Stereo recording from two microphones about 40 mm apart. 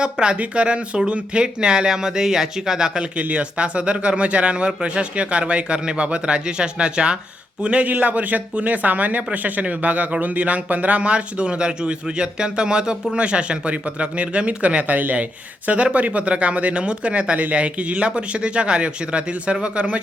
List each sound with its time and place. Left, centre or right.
0.0 s speech: right
3.0 s speech: right
7.9 s speech: right